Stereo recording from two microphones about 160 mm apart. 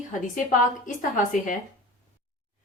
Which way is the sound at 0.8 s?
55° left (ahead or behind).